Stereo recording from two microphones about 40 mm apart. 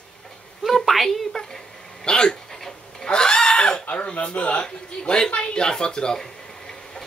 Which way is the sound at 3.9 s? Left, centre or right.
Left.